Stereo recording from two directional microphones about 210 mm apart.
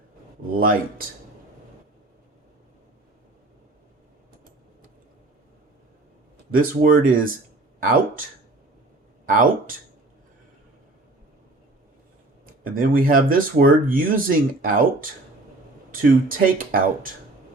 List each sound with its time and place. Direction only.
0.5 s speech: 40° right (ahead or behind)
6.5 s speech: 40° right (ahead or behind)
9.3 s speech: 40° right (ahead or behind)
12.6 s speech: 40° right (ahead or behind)